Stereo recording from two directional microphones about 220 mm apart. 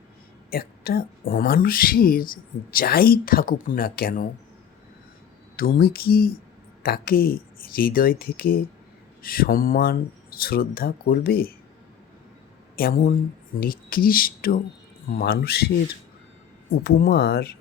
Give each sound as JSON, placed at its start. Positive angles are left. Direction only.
{"t": 0.5, "sound": "speech", "side_deg": 45}
{"t": 5.5, "sound": "speech", "side_deg": 40}
{"t": 12.7, "sound": "speech", "side_deg": 40}
{"t": 16.8, "sound": "speech", "side_deg": 45}